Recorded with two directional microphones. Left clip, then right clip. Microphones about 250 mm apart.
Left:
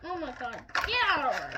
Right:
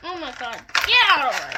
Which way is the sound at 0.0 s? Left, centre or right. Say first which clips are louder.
Right 6 dB; centre.